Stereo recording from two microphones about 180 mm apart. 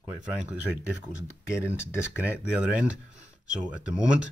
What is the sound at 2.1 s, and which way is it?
Speech, 5° right (ahead or behind).